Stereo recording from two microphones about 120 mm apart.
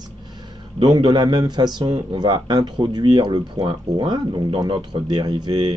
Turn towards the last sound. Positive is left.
turn(degrees=-35)  # may be behind; listen again after turning